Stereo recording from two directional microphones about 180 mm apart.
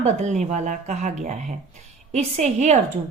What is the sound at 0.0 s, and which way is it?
Speech, 40° right (ahead or behind).